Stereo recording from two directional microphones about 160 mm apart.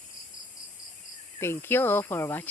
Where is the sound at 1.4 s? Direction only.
15° left (ahead or behind).